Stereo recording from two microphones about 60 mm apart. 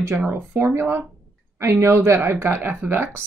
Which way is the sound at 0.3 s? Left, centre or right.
Right.